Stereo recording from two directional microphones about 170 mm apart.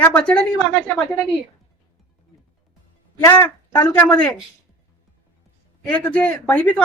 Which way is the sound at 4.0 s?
10° left (ahead or behind).